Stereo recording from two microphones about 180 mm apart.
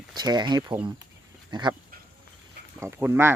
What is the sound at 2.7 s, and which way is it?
Speech, 10° right (ahead or behind).